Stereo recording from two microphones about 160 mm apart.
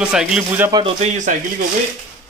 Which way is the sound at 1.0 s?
50° right (ahead or behind).